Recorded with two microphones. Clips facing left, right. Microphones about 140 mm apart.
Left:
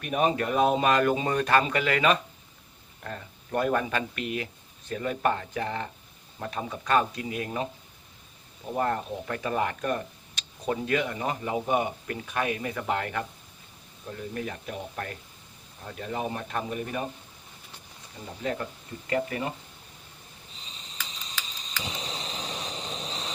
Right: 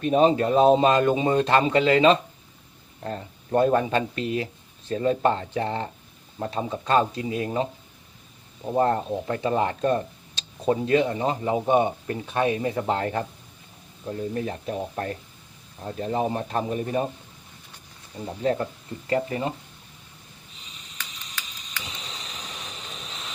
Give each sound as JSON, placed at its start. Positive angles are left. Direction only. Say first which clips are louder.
{"t": 0.0, "sound": "speech", "louder": "right 7 dB", "side_deg": -25}
{"t": 18.4, "sound": "speech", "louder": "right 7 dB", "side_deg": -30}
{"t": 20.7, "sound": "sniff", "louder": "left 2 dB", "side_deg": 30}
{"t": 21.2, "sound": "a sound", "louder": "left 1 dB", "side_deg": 30}